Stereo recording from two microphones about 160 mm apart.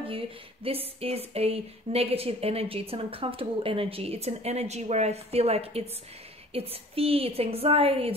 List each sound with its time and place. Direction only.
0.7 s a woman's voice: 35° right (ahead or behind)